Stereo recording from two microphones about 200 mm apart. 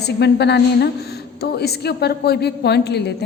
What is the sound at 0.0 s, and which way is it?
A woman's voice, 55° left (ahead or behind).